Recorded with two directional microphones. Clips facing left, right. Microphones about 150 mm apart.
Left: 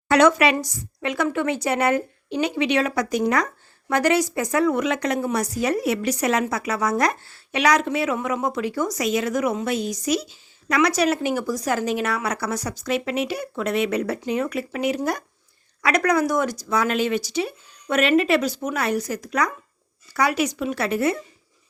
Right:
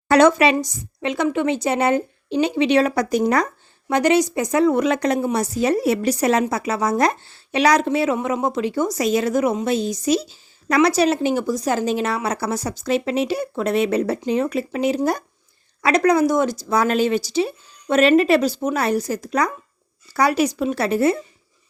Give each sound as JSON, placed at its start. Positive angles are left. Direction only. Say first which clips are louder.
{"t": 0.1, "sound": "speech", "louder": "right 3 dB", "side_deg": -30}
{"t": 3.8, "sound": "speech", "louder": "right 3 dB", "side_deg": -20}